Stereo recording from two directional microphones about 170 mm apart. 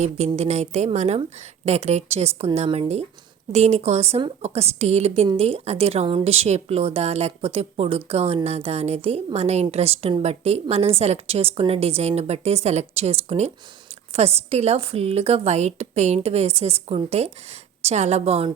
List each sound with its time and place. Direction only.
0.3 s a woman's voice: 40° right (ahead or behind)